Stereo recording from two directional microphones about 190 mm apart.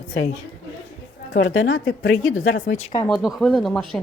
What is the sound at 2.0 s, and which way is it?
Speech, 45° left (ahead or behind).